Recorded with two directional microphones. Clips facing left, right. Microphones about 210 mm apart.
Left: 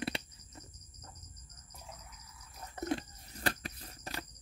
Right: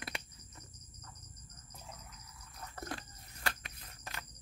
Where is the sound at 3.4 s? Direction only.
35° left (ahead or behind).